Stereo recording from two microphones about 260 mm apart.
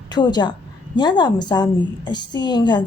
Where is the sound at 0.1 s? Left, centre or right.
Centre.